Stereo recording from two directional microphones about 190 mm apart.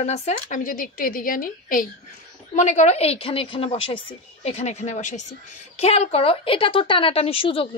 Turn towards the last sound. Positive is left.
turn(degrees=30)  # may be behind; listen again after turning